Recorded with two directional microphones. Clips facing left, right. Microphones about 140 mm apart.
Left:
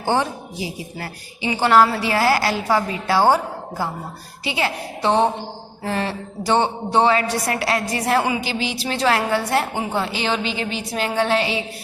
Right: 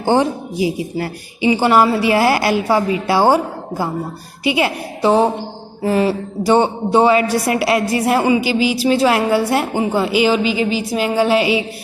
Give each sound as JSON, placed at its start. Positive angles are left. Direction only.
{"t": 0.0, "sound": "a woman's voice", "side_deg": -15}